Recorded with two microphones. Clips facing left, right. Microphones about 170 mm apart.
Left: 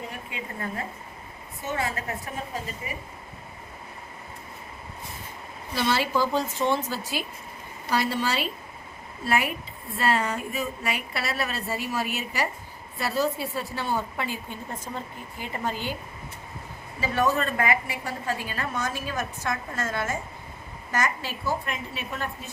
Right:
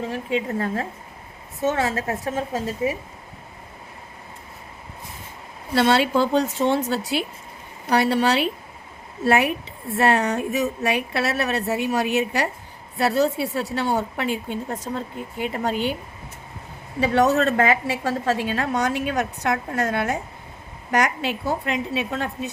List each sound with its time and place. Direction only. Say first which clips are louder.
0.1 s a woman's voice: right 12 dB; 90° right
5.7 s a woman's voice: right 7 dB; 70° right (ahead or behind)
15.4 s speech: right 5 dB; 85° right
15.7 s speech: right 8 dB; 20° right (ahead or behind)
17.0 s a woman's voice: right 7 dB; 75° right (ahead or behind)
18.4 s a woman's voice: right 8 dB; 75° right (ahead or behind)
21.2 s a woman's voice: right 5 dB; 75° right (ahead or behind)